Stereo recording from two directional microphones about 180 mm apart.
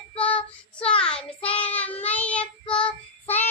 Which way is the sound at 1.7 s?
10° left (ahead or behind).